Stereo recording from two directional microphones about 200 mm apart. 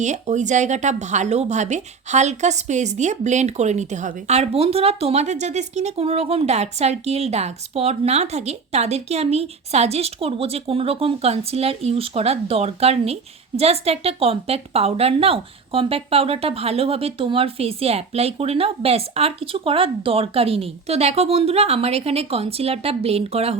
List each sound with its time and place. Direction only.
0.0 s speech: 35° right (ahead or behind)